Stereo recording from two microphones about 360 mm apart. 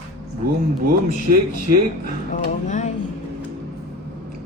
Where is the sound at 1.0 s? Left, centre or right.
Right.